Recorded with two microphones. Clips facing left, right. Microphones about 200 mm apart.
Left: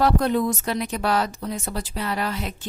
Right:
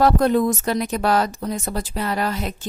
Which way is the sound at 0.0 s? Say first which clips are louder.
Right 4 dB; 45° right (ahead or behind).